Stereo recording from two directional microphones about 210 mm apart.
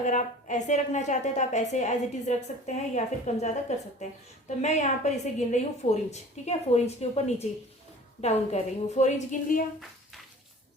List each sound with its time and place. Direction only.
0.0 s a woman's voice: 35° left (ahead or behind)